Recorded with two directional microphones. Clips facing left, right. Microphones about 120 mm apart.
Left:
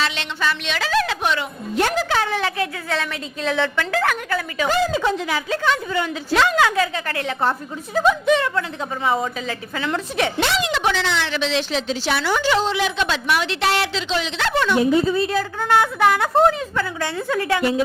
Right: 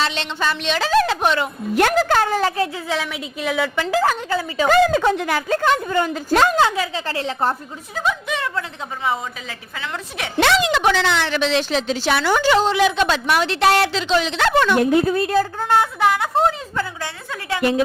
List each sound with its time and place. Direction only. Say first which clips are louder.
0.0 s a woman's voice: right 1 dB; 30° right (ahead or behind)
2.9 s a woman's voice: right 1 dB; 10° right (ahead or behind)
4.0 s a woman's voice: right 2 dB; 25° right (ahead or behind)
4.7 s a woman's voice: right 5 dB; 55° right (ahead or behind)
6.7 s a woman's voice: left 2 dB; 15° right (ahead or behind)
7.1 s a woman's voice: even; 30° right (ahead or behind)
8.3 s a woman's voice: left 6 dB; 10° right (ahead or behind)
10.4 s a woman's voice: right 9 dB; 90° right; by 15.4 s 55° right (ahead or behind)
15.4 s a woman's voice: right 1 dB; 30° right (ahead or behind)
17.6 s a woman's voice: right 6 dB; 65° right (ahead or behind)